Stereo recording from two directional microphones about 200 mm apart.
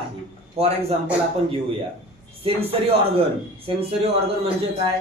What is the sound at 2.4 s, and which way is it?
Speech, 30° right (ahead or behind).